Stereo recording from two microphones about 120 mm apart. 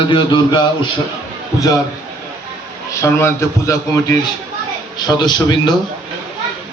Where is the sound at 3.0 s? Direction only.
25° left (ahead or behind).